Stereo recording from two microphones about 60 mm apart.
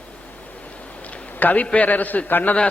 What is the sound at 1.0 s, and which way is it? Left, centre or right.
A man's voice, left.